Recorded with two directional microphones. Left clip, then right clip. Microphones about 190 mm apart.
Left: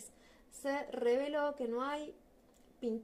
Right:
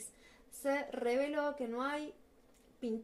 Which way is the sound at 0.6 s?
15° left (ahead or behind).